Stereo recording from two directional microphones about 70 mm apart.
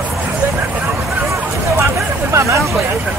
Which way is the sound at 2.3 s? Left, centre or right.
Right.